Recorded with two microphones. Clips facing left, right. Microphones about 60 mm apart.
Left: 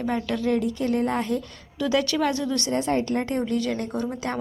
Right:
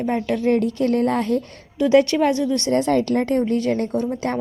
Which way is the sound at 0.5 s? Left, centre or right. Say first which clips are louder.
Right 5 dB; right.